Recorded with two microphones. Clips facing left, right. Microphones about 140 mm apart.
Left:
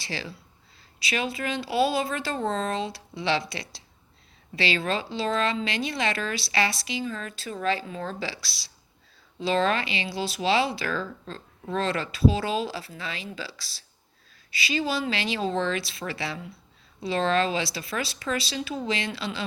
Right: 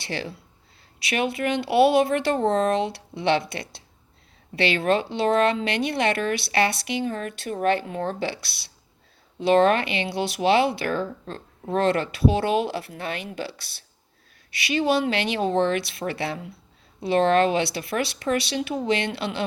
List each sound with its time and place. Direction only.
0.0 s speech: 55° right (ahead or behind)